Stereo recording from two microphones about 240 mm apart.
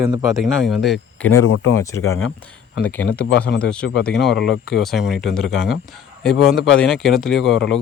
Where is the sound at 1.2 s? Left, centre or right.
Left.